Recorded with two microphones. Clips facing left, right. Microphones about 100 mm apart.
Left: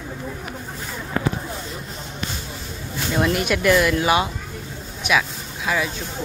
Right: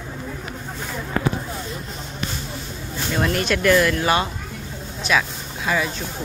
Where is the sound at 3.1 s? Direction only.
5° left (ahead or behind).